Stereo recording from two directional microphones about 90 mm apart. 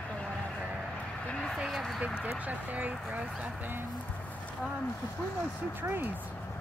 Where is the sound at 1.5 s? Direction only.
5° right (ahead or behind).